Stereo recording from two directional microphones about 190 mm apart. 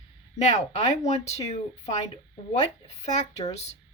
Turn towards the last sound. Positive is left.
turn(degrees=35)  # may be behind; listen again after turning